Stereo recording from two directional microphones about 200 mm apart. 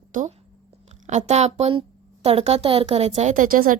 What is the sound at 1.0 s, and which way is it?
A woman's voice, 35° right (ahead or behind).